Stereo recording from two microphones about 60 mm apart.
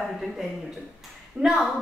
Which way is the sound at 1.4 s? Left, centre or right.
Centre.